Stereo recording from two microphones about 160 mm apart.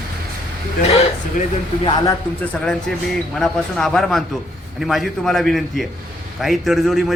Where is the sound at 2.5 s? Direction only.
5° left (ahead or behind).